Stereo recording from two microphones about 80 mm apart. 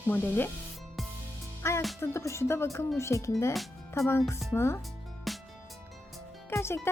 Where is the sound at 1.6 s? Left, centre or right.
Left.